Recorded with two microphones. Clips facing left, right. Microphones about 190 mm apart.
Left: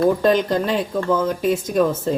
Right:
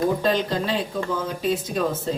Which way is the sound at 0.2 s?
50° left (ahead or behind).